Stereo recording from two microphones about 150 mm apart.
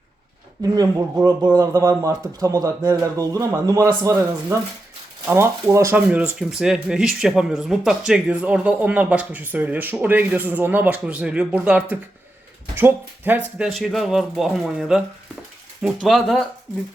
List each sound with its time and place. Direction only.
0.6 s speech: 25° right (ahead or behind)
13.6 s speech: centre (ahead or behind)